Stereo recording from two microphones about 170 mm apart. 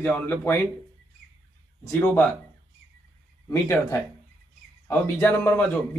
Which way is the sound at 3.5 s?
20° left (ahead or behind).